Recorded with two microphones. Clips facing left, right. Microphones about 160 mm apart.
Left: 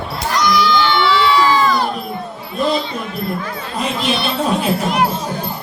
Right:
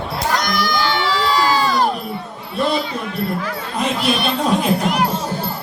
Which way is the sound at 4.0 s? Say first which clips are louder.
Even; 10° right (ahead or behind).